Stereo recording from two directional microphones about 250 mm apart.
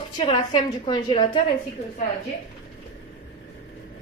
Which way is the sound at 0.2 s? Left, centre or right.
Centre.